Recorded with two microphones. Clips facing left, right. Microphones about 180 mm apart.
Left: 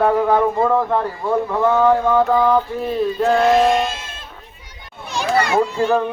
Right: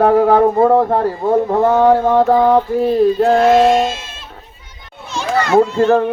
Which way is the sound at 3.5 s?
25° right (ahead or behind).